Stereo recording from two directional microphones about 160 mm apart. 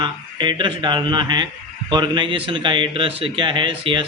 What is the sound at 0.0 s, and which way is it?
A man's voice, 30° right (ahead or behind).